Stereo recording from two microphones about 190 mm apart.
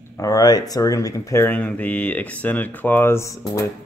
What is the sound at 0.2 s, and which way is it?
Speech, 20° left (ahead or behind).